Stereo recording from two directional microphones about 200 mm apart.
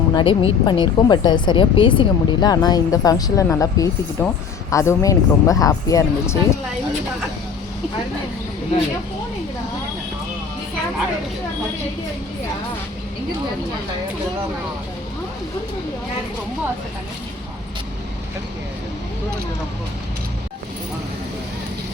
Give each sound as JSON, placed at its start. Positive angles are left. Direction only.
{"t": 0.1, "sound": "speech", "side_deg": 25}